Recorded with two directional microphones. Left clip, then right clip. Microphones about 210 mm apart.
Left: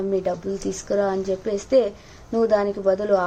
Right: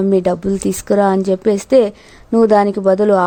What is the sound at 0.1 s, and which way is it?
A woman's voice, 50° right (ahead or behind).